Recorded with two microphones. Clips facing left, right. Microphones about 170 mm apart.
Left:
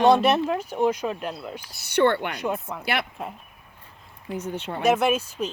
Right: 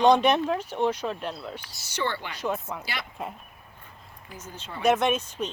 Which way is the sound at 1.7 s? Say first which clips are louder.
Left 11 dB; 60° left (ahead or behind).